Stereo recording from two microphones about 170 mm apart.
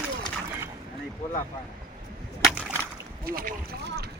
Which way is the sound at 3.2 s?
55° right (ahead or behind).